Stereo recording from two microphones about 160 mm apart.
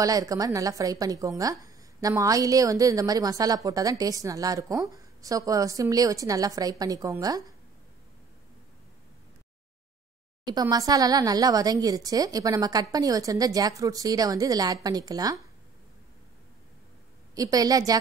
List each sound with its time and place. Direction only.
0.0 s a woman's voice: 20° right (ahead or behind)
10.4 s a woman's voice: 25° right (ahead or behind)
17.4 s a woman's voice: 25° right (ahead or behind)